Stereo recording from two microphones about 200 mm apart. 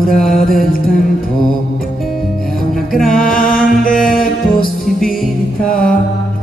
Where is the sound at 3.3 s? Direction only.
45° left (ahead or behind).